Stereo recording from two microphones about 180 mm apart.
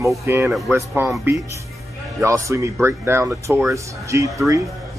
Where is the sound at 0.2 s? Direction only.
10° right (ahead or behind).